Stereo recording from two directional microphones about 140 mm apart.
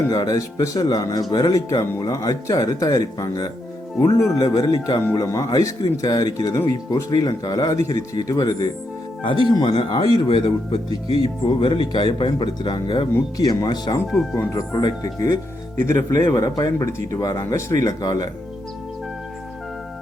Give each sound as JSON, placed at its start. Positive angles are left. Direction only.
{"t": 0.1, "sound": "speech", "side_deg": 30}